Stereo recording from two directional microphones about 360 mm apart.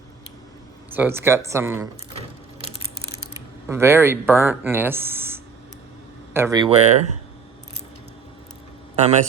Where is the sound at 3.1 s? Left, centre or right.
Centre.